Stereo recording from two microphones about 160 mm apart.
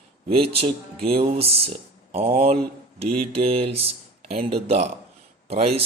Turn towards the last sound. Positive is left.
turn(degrees=-40)  # may be behind; listen again after turning